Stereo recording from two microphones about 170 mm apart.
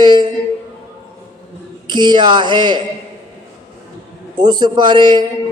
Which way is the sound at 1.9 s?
25° right (ahead or behind).